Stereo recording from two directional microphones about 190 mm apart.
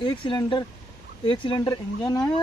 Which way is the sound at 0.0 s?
25° left (ahead or behind).